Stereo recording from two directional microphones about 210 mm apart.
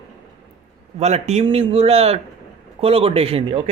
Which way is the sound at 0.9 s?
30° right (ahead or behind).